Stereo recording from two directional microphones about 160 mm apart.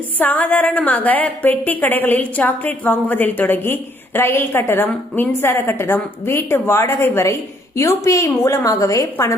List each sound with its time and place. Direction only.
0.2 s a woman's voice: 10° left (ahead or behind)